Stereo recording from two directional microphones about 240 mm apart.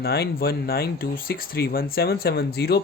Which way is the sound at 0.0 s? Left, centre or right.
Left.